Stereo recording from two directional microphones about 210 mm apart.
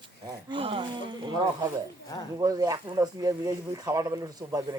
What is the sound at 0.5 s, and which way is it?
Speech, 25° right (ahead or behind).